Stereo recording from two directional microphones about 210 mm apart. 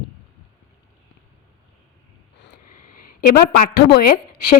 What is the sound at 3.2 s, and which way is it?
Speech, 50° left (ahead or behind).